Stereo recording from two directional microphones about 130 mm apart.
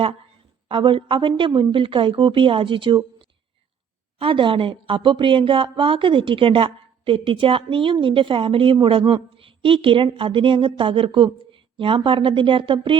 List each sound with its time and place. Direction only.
0.7 s a woman's voice: 40° right (ahead or behind)